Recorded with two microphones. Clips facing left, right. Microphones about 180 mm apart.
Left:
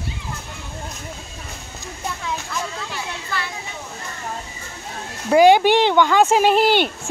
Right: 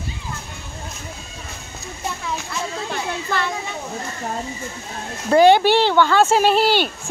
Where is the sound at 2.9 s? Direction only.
50° right (ahead or behind).